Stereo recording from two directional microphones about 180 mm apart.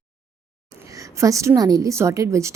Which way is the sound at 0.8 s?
20° right (ahead or behind).